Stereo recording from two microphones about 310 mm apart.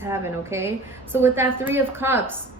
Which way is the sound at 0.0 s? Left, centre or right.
Centre.